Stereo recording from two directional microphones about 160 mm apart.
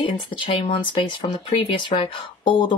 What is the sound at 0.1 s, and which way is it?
Speech, 30° left (ahead or behind).